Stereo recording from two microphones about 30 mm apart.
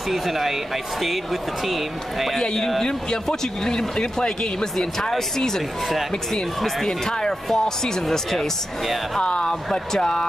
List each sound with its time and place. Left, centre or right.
0.1 s speech: centre
2.4 s speech: left
6.3 s speech: centre
9.2 s speech: left
9.9 s speech: centre